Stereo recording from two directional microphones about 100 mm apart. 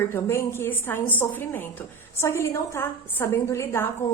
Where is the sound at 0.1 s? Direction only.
25° left (ahead or behind).